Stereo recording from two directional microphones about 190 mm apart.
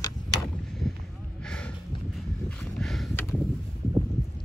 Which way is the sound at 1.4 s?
5° left (ahead or behind).